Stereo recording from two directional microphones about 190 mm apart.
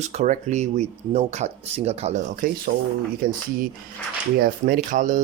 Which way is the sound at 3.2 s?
50° right (ahead or behind).